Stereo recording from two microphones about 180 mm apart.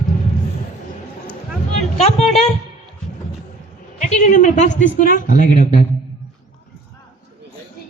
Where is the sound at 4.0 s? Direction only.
45° left (ahead or behind).